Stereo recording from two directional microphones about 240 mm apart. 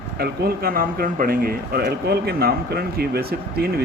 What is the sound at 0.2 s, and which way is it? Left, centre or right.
Speech, right.